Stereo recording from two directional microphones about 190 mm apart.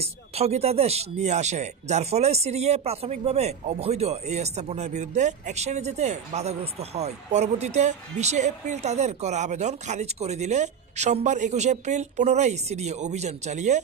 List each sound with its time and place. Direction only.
0.0 s speech: 35° right (ahead or behind)